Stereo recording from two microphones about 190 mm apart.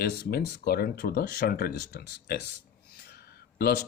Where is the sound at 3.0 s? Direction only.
55° left (ahead or behind).